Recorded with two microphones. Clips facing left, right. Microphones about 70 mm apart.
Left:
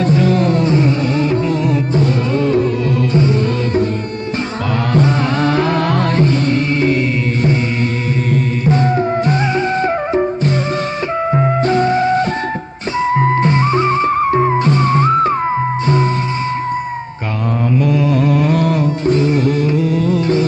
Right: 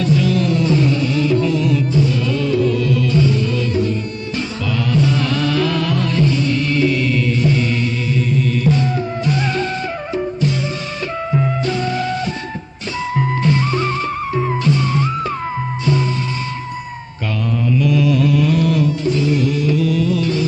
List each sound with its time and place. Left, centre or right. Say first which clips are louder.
0.0 s music: left 3 dB; left
4.9 s music: left 3 dB; left
8.6 s music: left 4 dB; left
11.3 s music: left 5 dB; left
17.7 s music: left 1 dB; left